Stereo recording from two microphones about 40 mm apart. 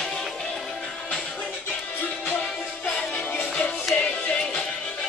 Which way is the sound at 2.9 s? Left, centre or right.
Left.